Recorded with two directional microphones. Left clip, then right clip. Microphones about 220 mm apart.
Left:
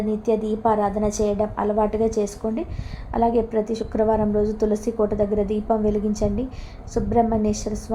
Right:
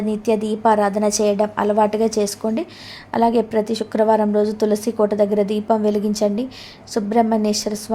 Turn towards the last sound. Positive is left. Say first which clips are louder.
# right 4 dB
turn(degrees=-25)  # may be behind; listen again after turning